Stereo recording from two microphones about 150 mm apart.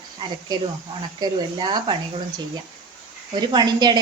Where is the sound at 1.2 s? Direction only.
30° right (ahead or behind).